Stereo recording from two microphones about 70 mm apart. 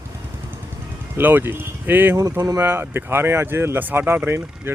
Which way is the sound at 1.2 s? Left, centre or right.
Right.